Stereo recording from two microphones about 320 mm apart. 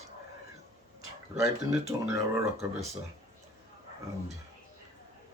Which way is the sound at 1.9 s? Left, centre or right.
Centre.